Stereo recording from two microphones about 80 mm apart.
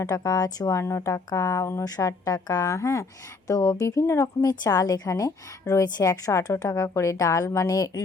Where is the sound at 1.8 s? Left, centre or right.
Left.